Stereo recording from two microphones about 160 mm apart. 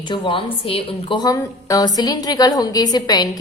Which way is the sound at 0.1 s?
30° left (ahead or behind).